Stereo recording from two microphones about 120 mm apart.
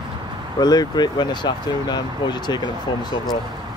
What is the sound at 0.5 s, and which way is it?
Speech, 35° left (ahead or behind).